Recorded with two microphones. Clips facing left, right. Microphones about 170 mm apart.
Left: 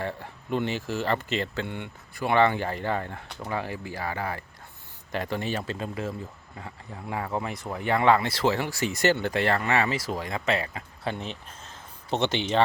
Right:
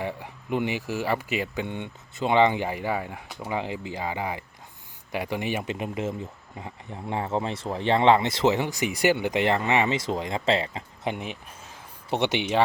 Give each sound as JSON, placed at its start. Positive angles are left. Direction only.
{"t": 0.0, "sound": "speech", "side_deg": -15}